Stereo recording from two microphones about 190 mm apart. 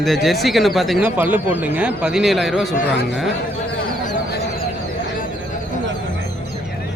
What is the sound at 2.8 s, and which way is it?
Speech, 65° left (ahead or behind).